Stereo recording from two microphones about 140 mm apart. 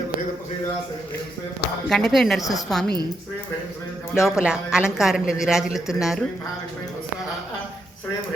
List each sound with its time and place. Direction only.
1.9 s speech: 5° left (ahead or behind)
2.4 s a woman's voice: 25° left (ahead or behind)
2.6 s speech: 5° left (ahead or behind)
4.1 s speech: 5° right (ahead or behind)